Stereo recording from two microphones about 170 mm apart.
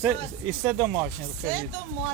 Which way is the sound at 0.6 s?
5° left (ahead or behind).